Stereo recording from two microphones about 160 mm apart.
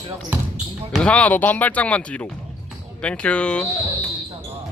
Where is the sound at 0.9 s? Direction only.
5° left (ahead or behind).